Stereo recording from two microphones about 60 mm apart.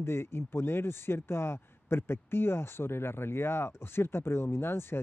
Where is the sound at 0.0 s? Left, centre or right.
Left.